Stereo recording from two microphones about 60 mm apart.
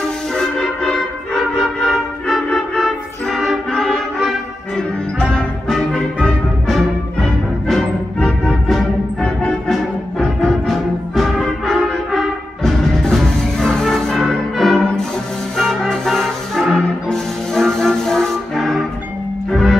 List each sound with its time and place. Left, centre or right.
0.4 s music: centre
4.7 s music: centre
7.6 s music: centre